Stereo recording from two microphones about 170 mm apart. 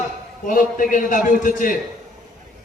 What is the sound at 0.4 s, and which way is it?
A man's voice, 50° left (ahead or behind).